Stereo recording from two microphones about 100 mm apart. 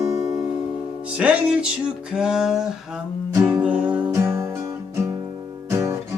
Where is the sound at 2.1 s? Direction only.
5° right (ahead or behind).